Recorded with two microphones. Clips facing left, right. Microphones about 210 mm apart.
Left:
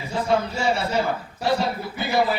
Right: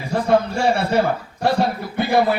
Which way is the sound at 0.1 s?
60° right (ahead or behind).